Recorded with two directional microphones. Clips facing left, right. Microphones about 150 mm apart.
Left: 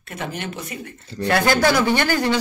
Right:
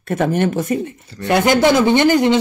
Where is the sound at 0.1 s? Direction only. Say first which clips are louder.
Right 13 dB; 50° right (ahead or behind).